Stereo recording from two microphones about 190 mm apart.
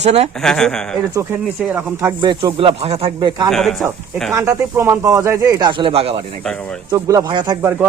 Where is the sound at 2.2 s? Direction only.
25° right (ahead or behind).